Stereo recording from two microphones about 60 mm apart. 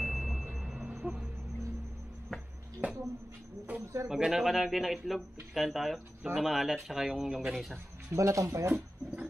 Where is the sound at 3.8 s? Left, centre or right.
Right.